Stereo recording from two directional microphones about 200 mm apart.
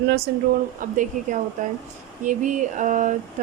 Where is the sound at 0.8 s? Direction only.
40° right (ahead or behind).